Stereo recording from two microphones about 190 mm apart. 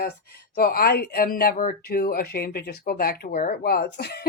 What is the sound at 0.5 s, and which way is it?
Speech, 50° left (ahead or behind).